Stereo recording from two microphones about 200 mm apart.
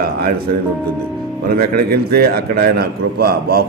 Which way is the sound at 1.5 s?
50° right (ahead or behind).